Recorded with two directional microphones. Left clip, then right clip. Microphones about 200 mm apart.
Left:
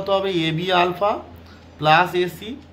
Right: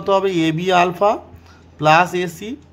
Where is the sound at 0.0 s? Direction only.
35° right (ahead or behind).